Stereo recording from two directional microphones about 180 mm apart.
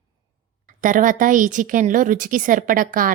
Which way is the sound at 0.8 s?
45° right (ahead or behind).